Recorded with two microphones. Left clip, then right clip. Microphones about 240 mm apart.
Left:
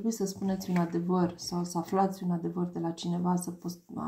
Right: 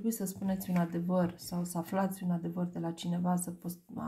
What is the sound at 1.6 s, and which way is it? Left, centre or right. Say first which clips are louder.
Speech: left 6 dB; right.